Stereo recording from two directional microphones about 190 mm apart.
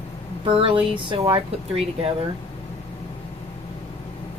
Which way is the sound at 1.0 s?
25° right (ahead or behind).